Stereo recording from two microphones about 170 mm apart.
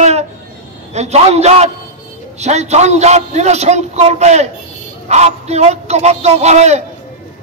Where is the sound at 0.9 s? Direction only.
40° right (ahead or behind).